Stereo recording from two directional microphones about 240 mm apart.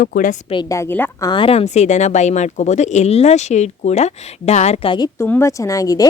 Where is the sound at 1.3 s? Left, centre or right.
Left.